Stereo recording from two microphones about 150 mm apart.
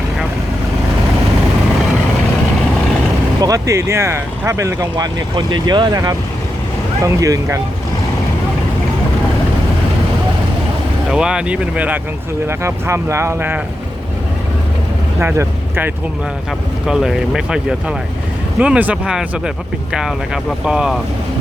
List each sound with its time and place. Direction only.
3.4 s speech: 20° right (ahead or behind)
11.1 s speech: 5° right (ahead or behind)
15.2 s speech: 15° right (ahead or behind)
16.8 s speech: 5° right (ahead or behind)